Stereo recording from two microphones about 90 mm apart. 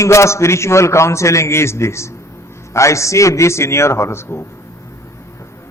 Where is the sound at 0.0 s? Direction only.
35° left (ahead or behind).